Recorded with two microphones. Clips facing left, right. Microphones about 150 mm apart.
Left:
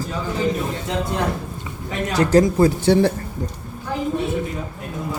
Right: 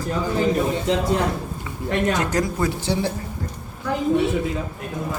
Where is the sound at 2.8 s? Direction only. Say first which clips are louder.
Left 8 dB; 60° left (ahead or behind).